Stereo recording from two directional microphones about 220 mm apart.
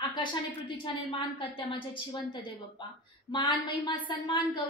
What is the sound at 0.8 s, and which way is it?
A woman's voice, 25° left (ahead or behind).